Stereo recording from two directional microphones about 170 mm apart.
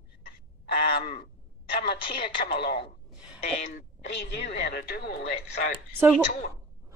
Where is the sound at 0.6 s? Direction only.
65° left (ahead or behind).